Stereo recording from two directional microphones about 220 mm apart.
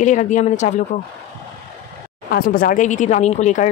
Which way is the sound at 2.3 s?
40° left (ahead or behind).